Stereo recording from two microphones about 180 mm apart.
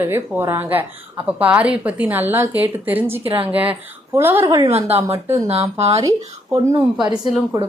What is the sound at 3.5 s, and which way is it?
A woman's voice, 10° right (ahead or behind).